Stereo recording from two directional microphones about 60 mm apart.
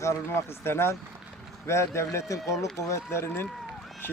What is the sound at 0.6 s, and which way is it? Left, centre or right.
Speech, left.